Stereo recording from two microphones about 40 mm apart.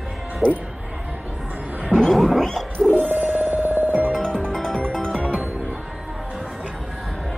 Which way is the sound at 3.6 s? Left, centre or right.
Right.